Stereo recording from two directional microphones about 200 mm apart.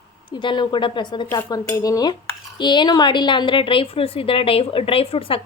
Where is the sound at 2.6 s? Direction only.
20° left (ahead or behind).